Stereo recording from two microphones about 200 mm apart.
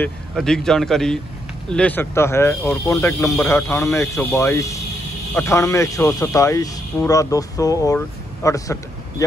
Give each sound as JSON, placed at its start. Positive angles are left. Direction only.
{"t": 0.0, "sound": "a man's voice", "side_deg": 5}